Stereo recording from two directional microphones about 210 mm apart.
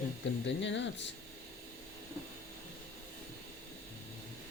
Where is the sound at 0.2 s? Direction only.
55° left (ahead or behind).